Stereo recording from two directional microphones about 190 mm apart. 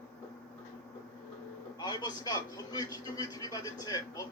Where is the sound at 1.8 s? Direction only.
20° left (ahead or behind).